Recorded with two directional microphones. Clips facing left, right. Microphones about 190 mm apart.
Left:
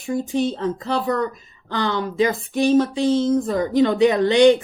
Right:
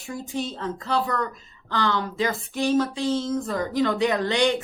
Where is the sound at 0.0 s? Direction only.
20° left (ahead or behind).